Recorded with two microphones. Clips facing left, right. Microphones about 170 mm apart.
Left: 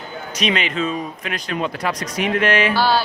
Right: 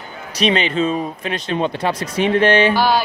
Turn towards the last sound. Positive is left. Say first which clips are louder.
# right 1 dB
turn(degrees=-15)  # may be behind; listen again after turning